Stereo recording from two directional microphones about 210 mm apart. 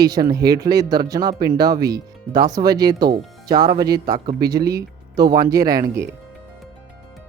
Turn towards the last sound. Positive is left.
turn(degrees=-15)  # may be behind; listen again after turning